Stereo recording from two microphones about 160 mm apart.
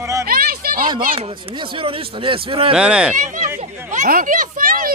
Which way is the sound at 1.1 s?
35° right (ahead or behind).